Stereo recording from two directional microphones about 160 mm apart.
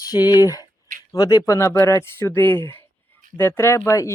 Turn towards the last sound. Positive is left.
turn(degrees=20)  # may be behind; listen again after turning